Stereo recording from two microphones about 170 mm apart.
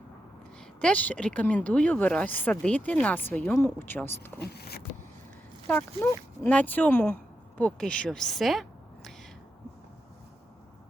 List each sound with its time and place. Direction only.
0.8 s speech: 5° left (ahead or behind)
4.4 s speech: 70° left (ahead or behind)
5.6 s speech: 10° left (ahead or behind)